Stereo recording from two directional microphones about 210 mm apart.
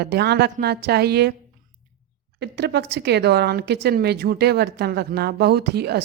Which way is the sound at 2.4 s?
55° right (ahead or behind).